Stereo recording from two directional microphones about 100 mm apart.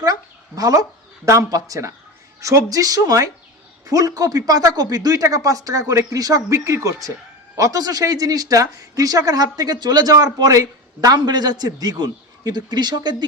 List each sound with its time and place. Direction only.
0.0 s a man's voice: 40° right (ahead or behind)